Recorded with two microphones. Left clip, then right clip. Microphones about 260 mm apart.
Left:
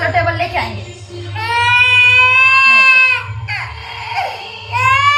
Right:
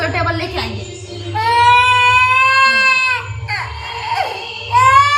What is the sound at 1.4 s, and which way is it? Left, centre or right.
Baby cry, centre.